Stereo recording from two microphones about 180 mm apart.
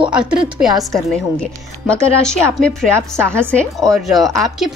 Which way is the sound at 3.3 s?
5° left (ahead or behind).